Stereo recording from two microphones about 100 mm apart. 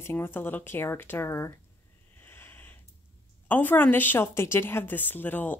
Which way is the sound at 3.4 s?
20° left (ahead or behind).